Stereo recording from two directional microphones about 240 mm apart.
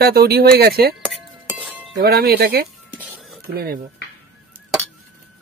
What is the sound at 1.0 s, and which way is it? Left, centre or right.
Chink, centre.